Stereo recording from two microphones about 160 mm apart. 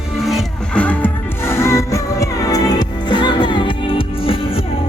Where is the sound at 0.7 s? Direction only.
10° left (ahead or behind).